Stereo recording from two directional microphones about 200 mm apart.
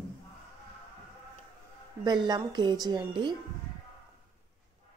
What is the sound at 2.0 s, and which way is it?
Speech, 20° right (ahead or behind).